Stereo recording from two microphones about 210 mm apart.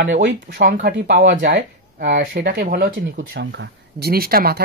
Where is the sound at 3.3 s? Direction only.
55° right (ahead or behind).